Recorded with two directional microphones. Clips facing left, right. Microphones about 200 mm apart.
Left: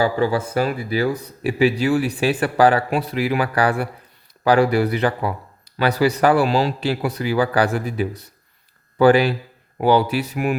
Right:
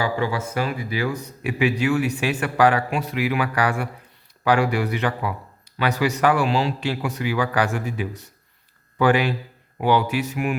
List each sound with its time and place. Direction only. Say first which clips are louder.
0.0 s a man's voice: left 5 dB; 35° left (ahead or behind)